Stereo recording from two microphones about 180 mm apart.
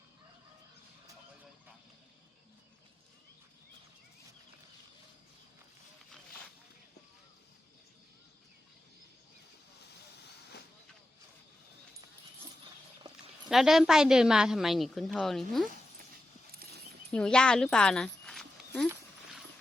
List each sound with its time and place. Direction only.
13.5 s a woman's voice: centre (ahead or behind)
16.5 s horse: 55° right (ahead or behind)
17.1 s speech: 5° left (ahead or behind)
18.9 s horse: 5° right (ahead or behind)